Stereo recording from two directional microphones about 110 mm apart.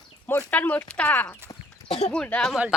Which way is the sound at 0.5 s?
15° left (ahead or behind).